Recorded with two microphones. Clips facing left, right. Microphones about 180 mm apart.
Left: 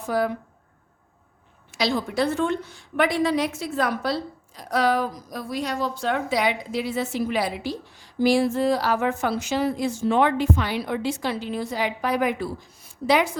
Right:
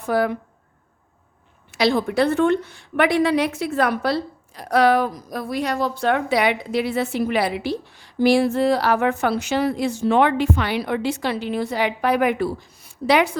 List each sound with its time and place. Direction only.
0.0 s a woman's voice: 65° right (ahead or behind)
1.7 s a woman's voice: 60° right (ahead or behind)